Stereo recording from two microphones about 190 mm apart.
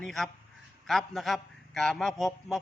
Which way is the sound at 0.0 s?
Centre (ahead or behind).